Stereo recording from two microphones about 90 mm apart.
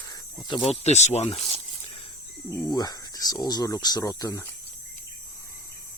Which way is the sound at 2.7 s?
50° left (ahead or behind).